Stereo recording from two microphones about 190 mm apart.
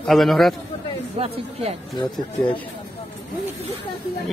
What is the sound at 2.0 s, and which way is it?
Speech, 25° left (ahead or behind).